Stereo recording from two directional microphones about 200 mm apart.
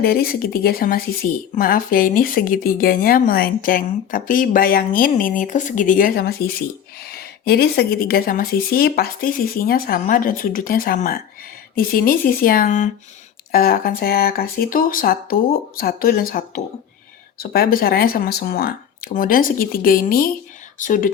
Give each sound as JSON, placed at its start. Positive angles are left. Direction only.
{"t": 0.0, "sound": "speech", "side_deg": 50}
{"t": 17.4, "sound": "speech", "side_deg": 50}